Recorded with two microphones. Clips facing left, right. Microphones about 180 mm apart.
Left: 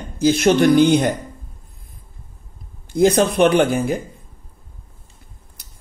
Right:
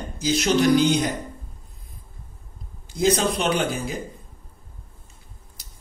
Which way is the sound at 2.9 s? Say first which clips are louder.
Left 6 dB; 55° left (ahead or behind).